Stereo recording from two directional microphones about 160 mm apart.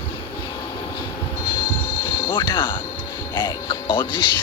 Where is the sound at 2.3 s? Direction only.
30° left (ahead or behind).